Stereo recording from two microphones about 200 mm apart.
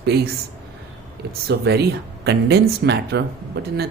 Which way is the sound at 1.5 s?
55° right (ahead or behind).